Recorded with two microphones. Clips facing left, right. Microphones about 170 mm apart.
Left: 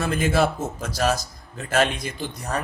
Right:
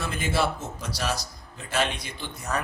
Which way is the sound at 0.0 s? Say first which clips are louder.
Left 6 dB; 50° left (ahead or behind).